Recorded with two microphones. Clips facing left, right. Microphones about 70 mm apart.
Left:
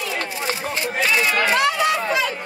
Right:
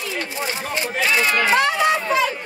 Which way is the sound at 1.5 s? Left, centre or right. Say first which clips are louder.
Right 1 dB; right.